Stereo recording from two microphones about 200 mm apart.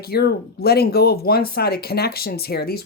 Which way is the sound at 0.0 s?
50° left (ahead or behind).